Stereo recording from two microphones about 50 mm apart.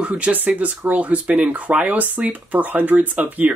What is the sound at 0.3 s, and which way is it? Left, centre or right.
Speech, right.